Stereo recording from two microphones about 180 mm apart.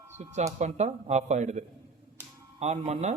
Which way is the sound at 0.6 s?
40° right (ahead or behind).